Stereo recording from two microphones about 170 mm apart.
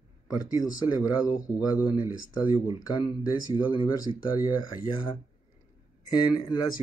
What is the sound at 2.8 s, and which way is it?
Speech, 20° left (ahead or behind).